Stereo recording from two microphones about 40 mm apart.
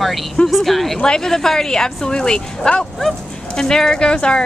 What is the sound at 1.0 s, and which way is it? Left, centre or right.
Speech, centre.